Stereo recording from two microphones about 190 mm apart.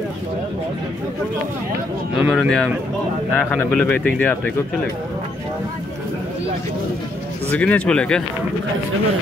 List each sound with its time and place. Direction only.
2.1 s speech: 5° right (ahead or behind)
7.4 s speech: 5° left (ahead or behind)